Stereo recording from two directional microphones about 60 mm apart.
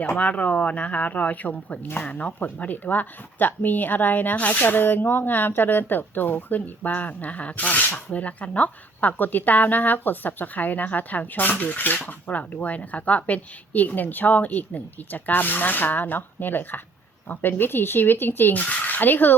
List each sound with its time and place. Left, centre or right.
0.2 s speech: left